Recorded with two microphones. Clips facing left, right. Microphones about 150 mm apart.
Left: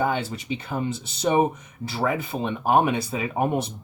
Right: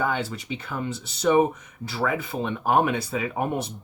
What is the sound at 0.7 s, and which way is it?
Speech, 20° left (ahead or behind).